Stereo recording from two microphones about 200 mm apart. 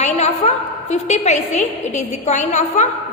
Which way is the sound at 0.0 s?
35° left (ahead or behind).